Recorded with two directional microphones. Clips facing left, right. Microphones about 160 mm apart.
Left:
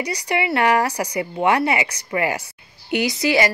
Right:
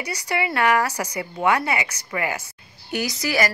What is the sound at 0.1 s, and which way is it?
A woman's voice, 30° left (ahead or behind).